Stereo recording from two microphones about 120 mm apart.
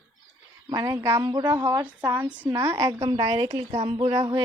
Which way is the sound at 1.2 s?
35° right (ahead or behind).